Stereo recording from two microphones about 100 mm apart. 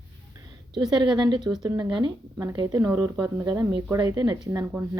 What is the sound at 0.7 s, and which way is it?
Speech, 50° right (ahead or behind).